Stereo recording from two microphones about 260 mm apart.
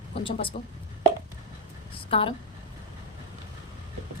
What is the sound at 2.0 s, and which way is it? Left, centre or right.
Speech, left.